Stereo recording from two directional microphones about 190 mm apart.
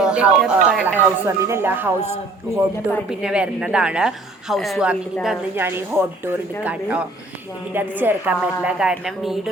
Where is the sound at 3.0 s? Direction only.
5° right (ahead or behind).